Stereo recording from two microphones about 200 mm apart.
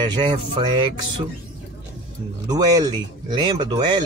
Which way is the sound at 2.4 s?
20° right (ahead or behind).